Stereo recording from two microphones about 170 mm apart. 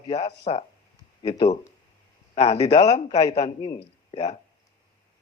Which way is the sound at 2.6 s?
40° left (ahead or behind).